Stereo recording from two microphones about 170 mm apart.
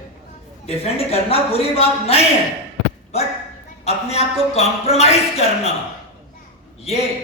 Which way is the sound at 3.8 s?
40° left (ahead or behind).